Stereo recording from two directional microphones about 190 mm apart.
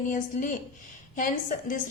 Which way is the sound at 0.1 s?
45° left (ahead or behind).